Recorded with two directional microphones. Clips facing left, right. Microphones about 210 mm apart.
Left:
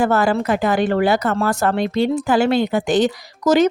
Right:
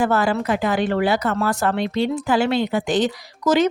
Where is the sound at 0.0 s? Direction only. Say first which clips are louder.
Left 2 dB; 45° left (ahead or behind).